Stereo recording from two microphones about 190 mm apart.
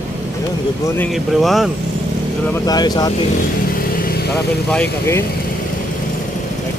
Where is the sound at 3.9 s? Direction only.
50° left (ahead or behind).